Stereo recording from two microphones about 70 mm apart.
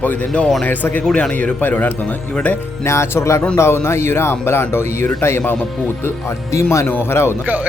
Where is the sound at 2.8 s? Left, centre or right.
Left.